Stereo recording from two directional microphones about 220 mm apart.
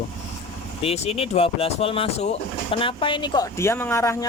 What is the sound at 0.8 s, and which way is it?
Speech, 30° left (ahead or behind).